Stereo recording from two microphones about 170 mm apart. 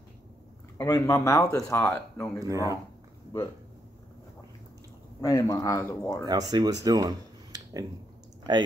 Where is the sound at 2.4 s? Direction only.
20° right (ahead or behind).